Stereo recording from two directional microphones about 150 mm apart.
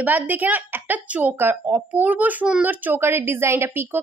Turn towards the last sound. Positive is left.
turn(degrees=-15)  # may be behind; listen again after turning